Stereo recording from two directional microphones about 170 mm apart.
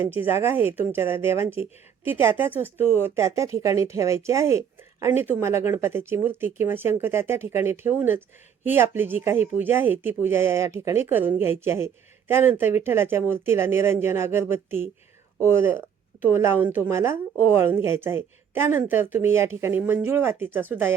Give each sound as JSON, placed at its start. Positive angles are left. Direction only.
{"t": 0.3, "sound": "a woman's voice", "side_deg": -15}
{"t": 2.7, "sound": "speech", "side_deg": 40}
{"t": 3.0, "sound": "a woman's voice", "side_deg": -15}